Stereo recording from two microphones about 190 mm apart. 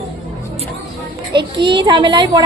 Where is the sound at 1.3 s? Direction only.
25° right (ahead or behind).